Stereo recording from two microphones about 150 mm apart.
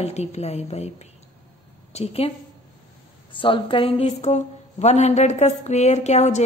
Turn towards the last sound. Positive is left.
turn(degrees=50)  # may be behind; listen again after turning